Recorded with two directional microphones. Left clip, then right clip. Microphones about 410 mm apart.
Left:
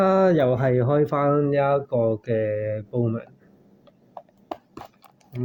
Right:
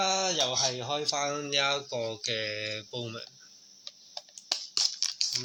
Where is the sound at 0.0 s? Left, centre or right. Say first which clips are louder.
Left 9 dB; left.